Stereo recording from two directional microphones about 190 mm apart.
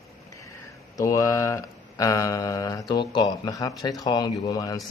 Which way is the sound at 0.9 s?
15° left (ahead or behind).